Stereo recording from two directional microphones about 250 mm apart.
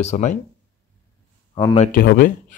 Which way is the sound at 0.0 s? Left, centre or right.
Left.